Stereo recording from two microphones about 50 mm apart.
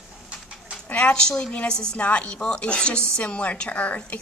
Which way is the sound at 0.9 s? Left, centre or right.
Left.